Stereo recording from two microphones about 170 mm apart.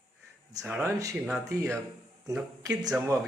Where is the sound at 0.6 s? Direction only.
5° right (ahead or behind).